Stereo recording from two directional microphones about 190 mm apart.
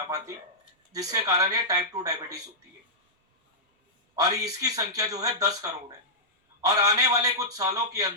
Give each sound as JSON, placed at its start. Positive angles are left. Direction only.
{"t": 0.9, "sound": "a man's voice", "side_deg": -20}
{"t": 4.1, "sound": "a man's voice", "side_deg": -20}